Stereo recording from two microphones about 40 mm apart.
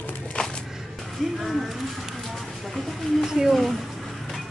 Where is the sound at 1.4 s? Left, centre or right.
Centre.